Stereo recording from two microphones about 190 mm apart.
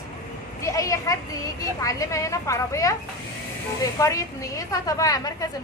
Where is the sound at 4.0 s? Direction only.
15° left (ahead or behind).